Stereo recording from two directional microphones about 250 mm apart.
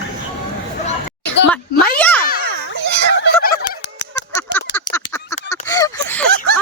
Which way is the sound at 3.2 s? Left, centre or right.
Left.